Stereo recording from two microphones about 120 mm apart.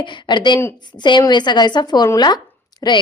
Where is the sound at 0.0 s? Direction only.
40° left (ahead or behind).